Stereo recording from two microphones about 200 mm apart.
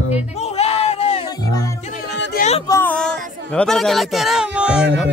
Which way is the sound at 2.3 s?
35° left (ahead or behind).